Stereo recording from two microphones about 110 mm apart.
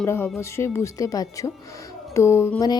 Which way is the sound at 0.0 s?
25° left (ahead or behind).